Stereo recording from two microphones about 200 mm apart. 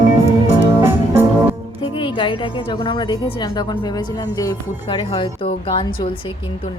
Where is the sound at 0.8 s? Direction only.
10° right (ahead or behind).